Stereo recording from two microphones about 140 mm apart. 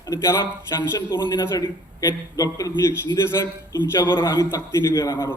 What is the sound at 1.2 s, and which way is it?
A man's voice, 30° left (ahead or behind).